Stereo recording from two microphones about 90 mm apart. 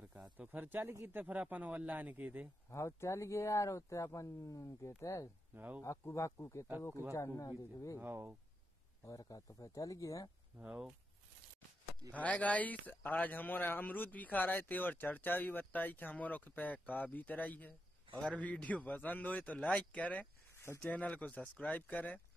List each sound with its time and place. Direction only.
0.5 s speech: 20° right (ahead or behind)
2.7 s speech: 30° left (ahead or behind)
5.5 s speech: 20° right (ahead or behind)
6.0 s speech: 30° left (ahead or behind)
8.0 s speech: 25° right (ahead or behind)
9.0 s speech: 40° left (ahead or behind)
10.6 s speech: 10° right (ahead or behind)
12.1 s a man's voice: 15° left (ahead or behind)